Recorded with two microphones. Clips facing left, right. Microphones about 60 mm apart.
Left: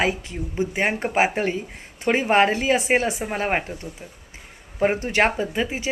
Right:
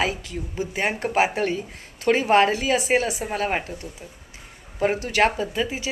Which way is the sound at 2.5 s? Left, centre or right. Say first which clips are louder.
Left 1 dB; left.